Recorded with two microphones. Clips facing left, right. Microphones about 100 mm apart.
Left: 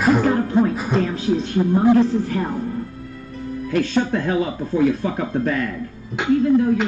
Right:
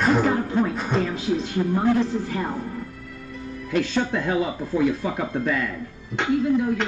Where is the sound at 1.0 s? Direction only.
35° left (ahead or behind).